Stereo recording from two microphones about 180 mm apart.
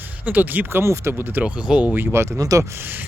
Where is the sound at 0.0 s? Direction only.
10° right (ahead or behind).